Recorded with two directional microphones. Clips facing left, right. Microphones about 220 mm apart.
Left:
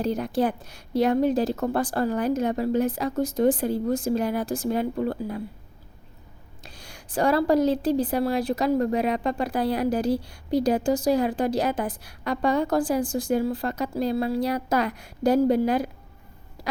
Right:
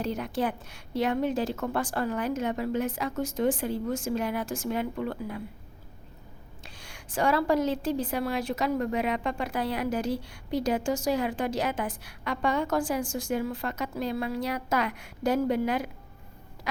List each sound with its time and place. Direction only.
0.0 s a woman's voice: 35° left (ahead or behind)
6.6 s a woman's voice: 40° left (ahead or behind)